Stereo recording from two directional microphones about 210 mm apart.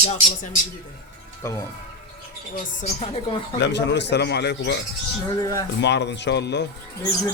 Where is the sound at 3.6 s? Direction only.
55° left (ahead or behind).